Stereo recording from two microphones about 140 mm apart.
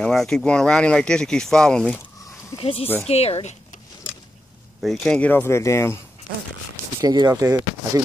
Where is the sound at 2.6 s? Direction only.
40° left (ahead or behind).